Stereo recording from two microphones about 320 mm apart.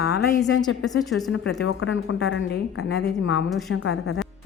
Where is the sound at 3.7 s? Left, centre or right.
Left.